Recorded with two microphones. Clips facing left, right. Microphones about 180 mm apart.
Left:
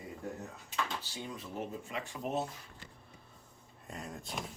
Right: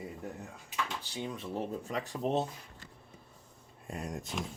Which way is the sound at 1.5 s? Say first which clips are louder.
Right 4 dB; 40° right (ahead or behind).